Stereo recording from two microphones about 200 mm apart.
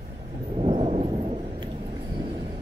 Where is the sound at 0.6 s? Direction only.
30° right (ahead or behind).